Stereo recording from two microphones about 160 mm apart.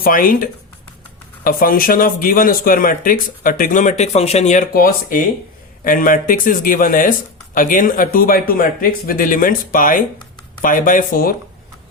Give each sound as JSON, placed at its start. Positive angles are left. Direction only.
{"t": 0.0, "sound": "speech", "side_deg": 60}
{"t": 1.5, "sound": "speech", "side_deg": 60}